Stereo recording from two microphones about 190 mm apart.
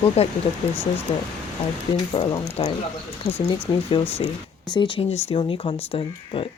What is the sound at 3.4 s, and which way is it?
Speech, 25° left (ahead or behind).